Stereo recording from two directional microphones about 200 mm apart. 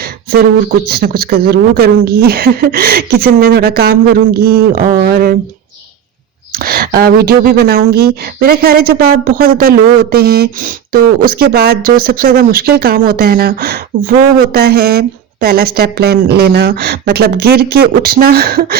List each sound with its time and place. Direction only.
0.0 s a sound: 50° right (ahead or behind)
0.9 s speech: 50° right (ahead or behind)
6.5 s speech: 50° right (ahead or behind)